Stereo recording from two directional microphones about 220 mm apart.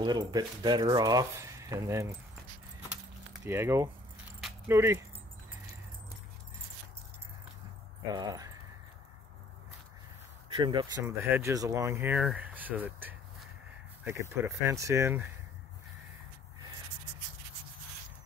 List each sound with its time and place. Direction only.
0.0 s speech: 20° right (ahead or behind)
3.4 s speech: 10° right (ahead or behind)
8.1 s speech: 15° right (ahead or behind)
10.5 s speech: 20° right (ahead or behind)